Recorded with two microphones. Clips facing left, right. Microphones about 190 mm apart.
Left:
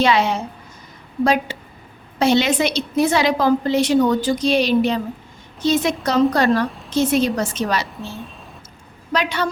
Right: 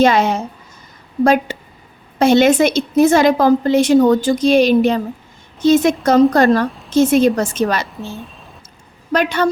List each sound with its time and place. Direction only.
0.0 s a woman's voice: 45° right (ahead or behind)
9.1 s a woman's voice: 50° right (ahead or behind)